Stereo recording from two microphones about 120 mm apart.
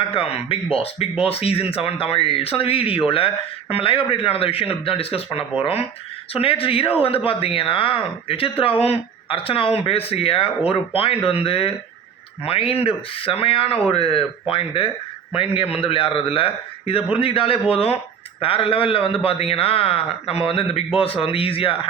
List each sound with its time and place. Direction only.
0.1 s speech: 50° left (ahead or behind)